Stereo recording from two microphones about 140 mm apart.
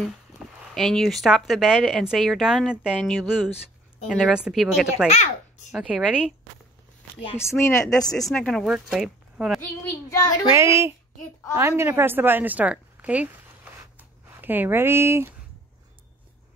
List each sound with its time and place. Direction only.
0.0 s speech: 5° left (ahead or behind)
5.0 s a child's voice: 50° left (ahead or behind)
5.7 s speech: centre (ahead or behind)
7.3 s a woman's voice: 20° left (ahead or behind)
8.3 s speech: 5° left (ahead or behind)
9.8 s a woman's voice: 25° left (ahead or behind)
10.5 s a woman's voice: 20° right (ahead or behind)
13.9 s a sound: 15° right (ahead or behind)